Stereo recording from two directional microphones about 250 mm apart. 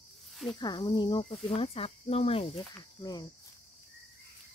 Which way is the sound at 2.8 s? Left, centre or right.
Centre.